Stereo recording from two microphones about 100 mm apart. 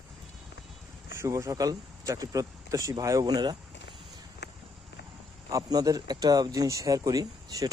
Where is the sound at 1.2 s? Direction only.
35° right (ahead or behind).